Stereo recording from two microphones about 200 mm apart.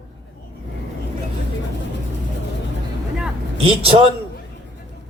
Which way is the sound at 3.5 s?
30° right (ahead or behind).